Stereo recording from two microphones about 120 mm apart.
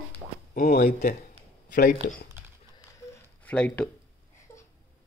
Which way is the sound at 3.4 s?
10° left (ahead or behind).